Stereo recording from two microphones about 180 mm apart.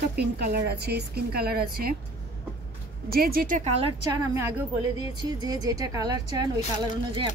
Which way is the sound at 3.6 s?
35° right (ahead or behind).